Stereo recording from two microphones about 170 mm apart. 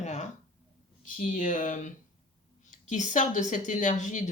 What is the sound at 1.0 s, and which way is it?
Speech, 50° left (ahead or behind).